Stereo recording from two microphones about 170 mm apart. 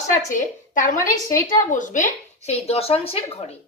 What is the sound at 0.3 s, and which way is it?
A woman's voice, 50° left (ahead or behind).